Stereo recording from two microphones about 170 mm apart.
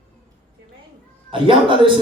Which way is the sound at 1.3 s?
30° right (ahead or behind).